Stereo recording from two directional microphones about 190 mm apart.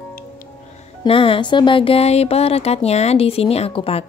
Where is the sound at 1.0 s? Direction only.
30° left (ahead or behind).